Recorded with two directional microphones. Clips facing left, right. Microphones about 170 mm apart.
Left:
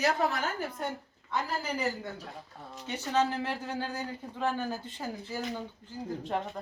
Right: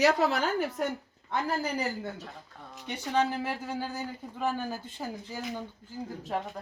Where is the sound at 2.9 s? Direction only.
10° right (ahead or behind).